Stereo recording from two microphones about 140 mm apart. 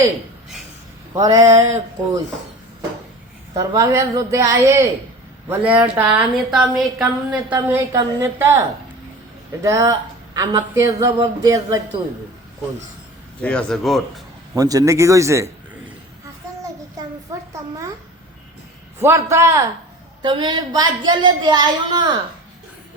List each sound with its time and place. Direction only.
1.1 s mantra: 25° right (ahead or behind)
1.5 s speech: 25° right (ahead or behind)
3.5 s speech: 25° right (ahead or behind)
5.5 s a woman's voice: 10° right (ahead or behind)
9.6 s speech: 25° right (ahead or behind)
13.4 s a man's voice: 10° left (ahead or behind)
14.5 s speech: 25° right (ahead or behind)
17.5 s a sound: 20° right (ahead or behind)
18.9 s speech: 20° right (ahead or behind)
20.2 s a woman's voice: 35° right (ahead or behind)